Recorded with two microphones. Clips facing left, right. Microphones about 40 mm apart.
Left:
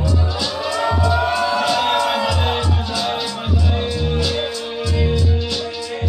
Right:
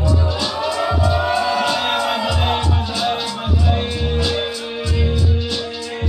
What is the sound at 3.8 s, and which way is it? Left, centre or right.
Music, centre.